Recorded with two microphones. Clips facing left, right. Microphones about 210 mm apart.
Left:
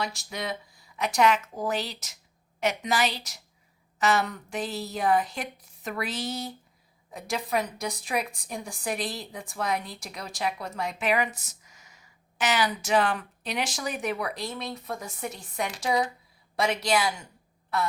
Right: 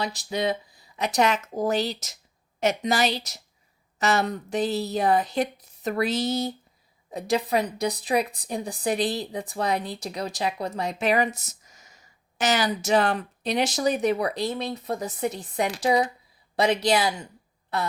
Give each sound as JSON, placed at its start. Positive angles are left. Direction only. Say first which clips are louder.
{"t": 0.0, "sound": "a woman's voice", "louder": "right 6 dB", "side_deg": -35}
{"t": 3.9, "sound": "a woman's voice", "louder": "right 2 dB", "side_deg": -40}
{"t": 7.1, "sound": "a woman's voice", "louder": "right 5 dB", "side_deg": -35}